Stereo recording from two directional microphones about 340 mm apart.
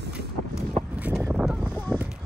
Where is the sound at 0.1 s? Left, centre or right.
Centre.